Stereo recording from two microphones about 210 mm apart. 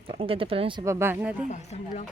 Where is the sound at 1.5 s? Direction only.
30° left (ahead or behind).